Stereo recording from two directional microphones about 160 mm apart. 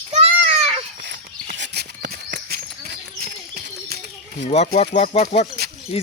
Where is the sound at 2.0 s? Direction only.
75° right (ahead or behind).